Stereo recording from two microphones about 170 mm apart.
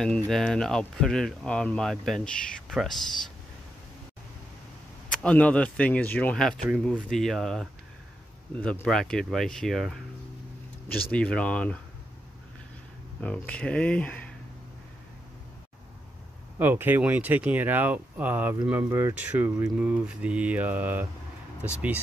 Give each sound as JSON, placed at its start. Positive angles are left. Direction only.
{"t": 0.0, "sound": "speech", "side_deg": 5}
{"t": 5.1, "sound": "speech", "side_deg": 5}
{"t": 11.1, "sound": "speech", "side_deg": 5}
{"t": 13.2, "sound": "speech", "side_deg": 5}
{"t": 16.5, "sound": "speech", "side_deg": -10}